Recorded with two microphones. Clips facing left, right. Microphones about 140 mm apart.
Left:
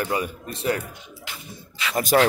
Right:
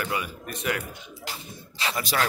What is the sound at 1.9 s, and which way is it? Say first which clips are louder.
Speech: left 10 dB; 45° left (ahead or behind).